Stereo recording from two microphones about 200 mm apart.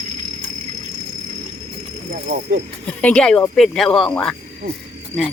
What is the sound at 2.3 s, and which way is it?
Speech, 55° right (ahead or behind).